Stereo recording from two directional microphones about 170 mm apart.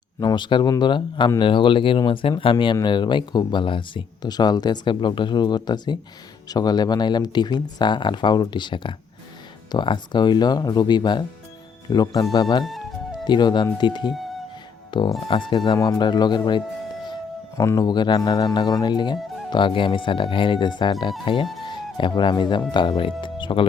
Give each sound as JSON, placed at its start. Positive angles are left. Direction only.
{"t": 0.2, "sound": "speech", "side_deg": 25}
{"t": 14.8, "sound": "music", "side_deg": 30}
{"t": 15.3, "sound": "speech", "side_deg": 30}